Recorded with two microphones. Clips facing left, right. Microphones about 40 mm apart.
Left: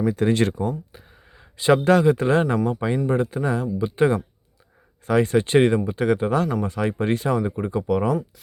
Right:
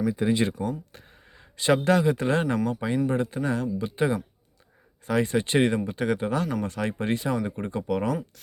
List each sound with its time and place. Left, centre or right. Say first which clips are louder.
0.3 s speech: left 3 dB; left
1.0 s a sound: left 2 dB; centre
1.6 s speech: left 5 dB; left
3.9 s speech: left 7 dB; left
7.6 s speech: left 5 dB; centre